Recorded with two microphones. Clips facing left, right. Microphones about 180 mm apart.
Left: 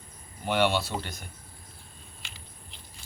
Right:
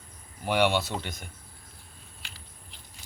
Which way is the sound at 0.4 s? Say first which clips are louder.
Right 1 dB; 15° right (ahead or behind).